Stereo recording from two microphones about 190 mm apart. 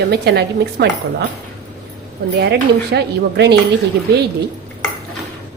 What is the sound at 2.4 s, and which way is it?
A woman's voice, 60° right (ahead or behind).